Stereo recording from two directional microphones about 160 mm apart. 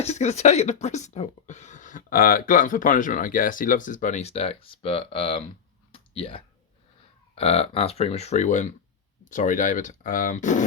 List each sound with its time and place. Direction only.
0.0 s speech: 45° left (ahead or behind)
5.9 s a sound: 35° left (ahead or behind)
7.3 s speech: 40° left (ahead or behind)